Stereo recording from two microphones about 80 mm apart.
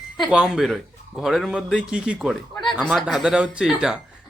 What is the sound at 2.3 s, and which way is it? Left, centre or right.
Speech, centre.